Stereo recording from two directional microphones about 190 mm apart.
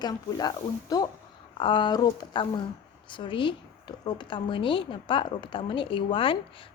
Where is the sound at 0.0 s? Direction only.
20° left (ahead or behind).